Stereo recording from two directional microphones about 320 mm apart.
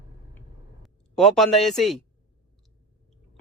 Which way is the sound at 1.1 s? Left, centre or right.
Centre.